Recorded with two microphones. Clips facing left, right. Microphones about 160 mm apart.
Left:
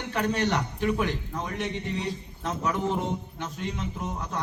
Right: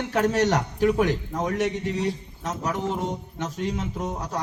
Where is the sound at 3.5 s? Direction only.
40° right (ahead or behind).